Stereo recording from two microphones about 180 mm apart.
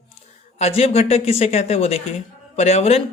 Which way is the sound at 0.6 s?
35° left (ahead or behind).